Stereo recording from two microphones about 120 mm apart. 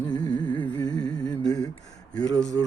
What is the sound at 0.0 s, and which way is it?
Mantra, 35° left (ahead or behind).